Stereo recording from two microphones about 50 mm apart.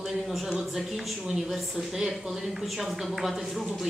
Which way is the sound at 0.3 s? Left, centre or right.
Centre.